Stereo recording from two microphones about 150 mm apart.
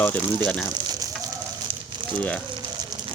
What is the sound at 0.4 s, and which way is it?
Speech, 5° left (ahead or behind).